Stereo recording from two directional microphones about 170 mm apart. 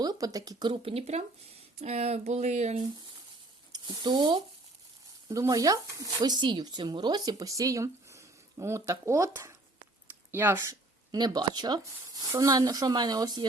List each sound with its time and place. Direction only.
0.0 s a woman's voice: 20° right (ahead or behind); by 2.8 s 40° right (ahead or behind)
3.7 s speech: 25° right (ahead or behind)